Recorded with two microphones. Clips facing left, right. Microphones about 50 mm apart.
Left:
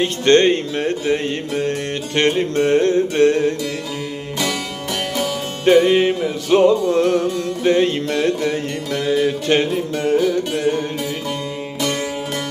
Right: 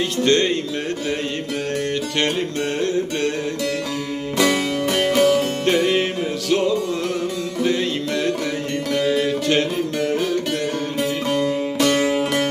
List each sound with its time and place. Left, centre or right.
0.0 s music: left
4.4 s music: right
5.6 s music: centre
6.5 s music: left
9.2 s music: left
10.2 s music: right
11.3 s music: right